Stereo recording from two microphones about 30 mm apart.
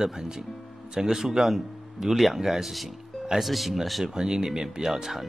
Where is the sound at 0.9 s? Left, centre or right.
Centre.